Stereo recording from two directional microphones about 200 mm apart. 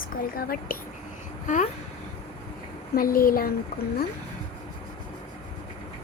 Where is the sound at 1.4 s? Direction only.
40° left (ahead or behind).